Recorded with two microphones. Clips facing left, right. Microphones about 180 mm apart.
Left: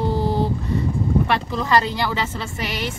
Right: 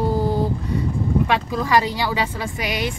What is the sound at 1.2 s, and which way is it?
Speech, 10° right (ahead or behind).